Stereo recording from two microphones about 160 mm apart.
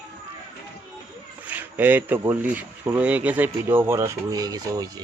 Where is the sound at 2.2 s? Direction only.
15° right (ahead or behind).